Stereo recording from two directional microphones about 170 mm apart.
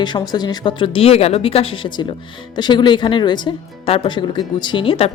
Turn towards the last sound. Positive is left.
turn(degrees=30)  # may be behind; listen again after turning